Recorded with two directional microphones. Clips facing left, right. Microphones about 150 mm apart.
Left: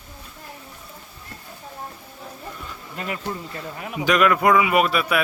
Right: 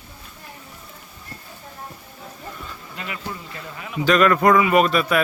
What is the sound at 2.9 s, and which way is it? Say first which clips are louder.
Speech: left 4 dB; 40° left (ahead or behind).